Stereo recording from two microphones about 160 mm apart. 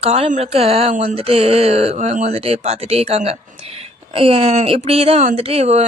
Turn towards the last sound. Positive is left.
turn(degrees=-40)  # may be behind; listen again after turning